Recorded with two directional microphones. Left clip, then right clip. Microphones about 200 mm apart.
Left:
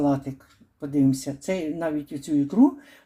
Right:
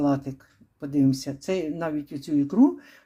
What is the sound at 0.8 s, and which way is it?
Speech, 10° right (ahead or behind).